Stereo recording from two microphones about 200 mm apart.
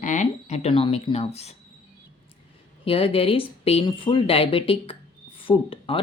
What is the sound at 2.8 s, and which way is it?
Speech, 30° left (ahead or behind).